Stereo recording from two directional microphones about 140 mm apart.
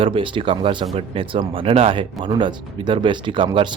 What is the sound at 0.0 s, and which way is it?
Speech, 40° right (ahead or behind).